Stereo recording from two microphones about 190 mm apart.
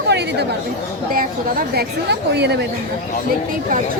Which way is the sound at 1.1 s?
50° right (ahead or behind).